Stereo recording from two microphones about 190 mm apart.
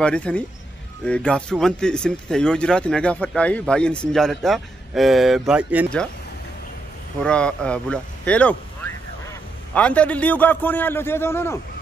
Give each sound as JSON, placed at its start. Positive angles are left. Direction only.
{"t": 0.0, "sound": "speech", "side_deg": 5}
{"t": 7.2, "sound": "a man's voice", "side_deg": 5}